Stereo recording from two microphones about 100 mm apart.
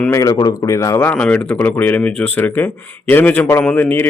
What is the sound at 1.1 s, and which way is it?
Speech, 10° left (ahead or behind).